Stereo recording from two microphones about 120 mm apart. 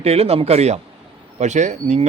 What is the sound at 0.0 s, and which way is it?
Speech, 55° right (ahead or behind).